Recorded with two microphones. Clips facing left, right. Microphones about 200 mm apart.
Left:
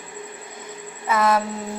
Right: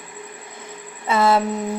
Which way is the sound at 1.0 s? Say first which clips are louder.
Right 2 dB; 30° right (ahead or behind).